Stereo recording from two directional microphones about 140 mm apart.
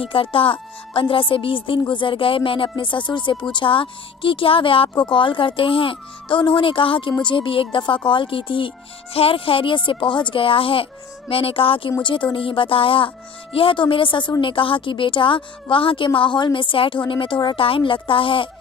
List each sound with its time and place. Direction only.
0.0 s speech: 40° left (ahead or behind)